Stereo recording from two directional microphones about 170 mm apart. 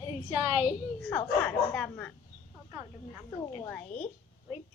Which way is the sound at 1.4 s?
5° left (ahead or behind).